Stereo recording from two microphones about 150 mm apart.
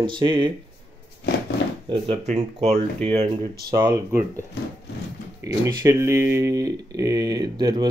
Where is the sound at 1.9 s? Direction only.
40° right (ahead or behind).